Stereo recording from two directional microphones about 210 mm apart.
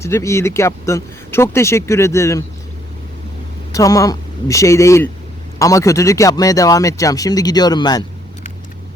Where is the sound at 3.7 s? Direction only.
15° left (ahead or behind).